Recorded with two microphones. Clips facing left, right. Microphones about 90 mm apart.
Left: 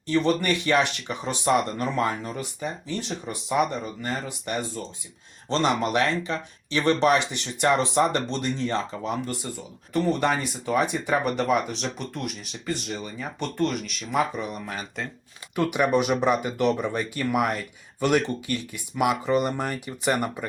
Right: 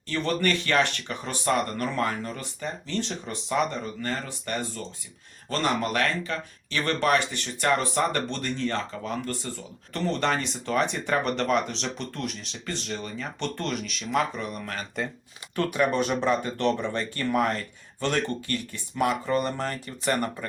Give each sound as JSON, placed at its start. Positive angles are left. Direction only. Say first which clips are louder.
{"t": 0.1, "sound": "speech", "louder": "left 3 dB", "side_deg": 15}